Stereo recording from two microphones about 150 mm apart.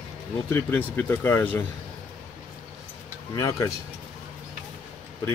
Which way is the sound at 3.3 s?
20° left (ahead or behind).